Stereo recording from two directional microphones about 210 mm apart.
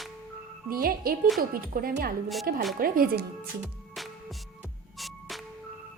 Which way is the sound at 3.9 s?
Centre (ahead or behind).